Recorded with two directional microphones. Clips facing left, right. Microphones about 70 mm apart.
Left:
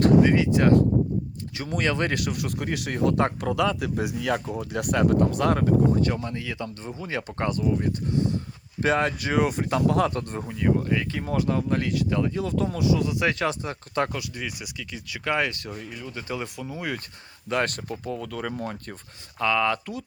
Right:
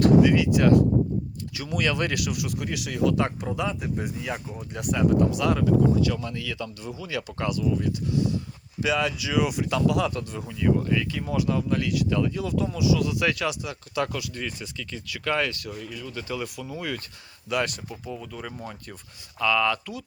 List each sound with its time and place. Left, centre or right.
0.0 s speech: left
4.5 s speech: left
13.0 s speech: left
13.4 s speech: left
14.1 s speech: left
17.5 s speech: left
19.4 s speech: left